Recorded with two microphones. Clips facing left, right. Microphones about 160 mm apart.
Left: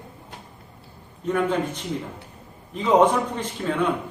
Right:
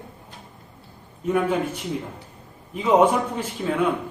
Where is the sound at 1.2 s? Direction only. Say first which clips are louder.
Right 1 dB; 10° right (ahead or behind).